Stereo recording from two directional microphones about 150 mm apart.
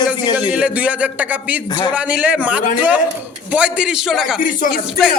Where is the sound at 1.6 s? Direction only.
30° left (ahead or behind).